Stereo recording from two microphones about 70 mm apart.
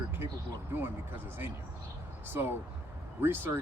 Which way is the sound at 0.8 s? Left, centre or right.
Right.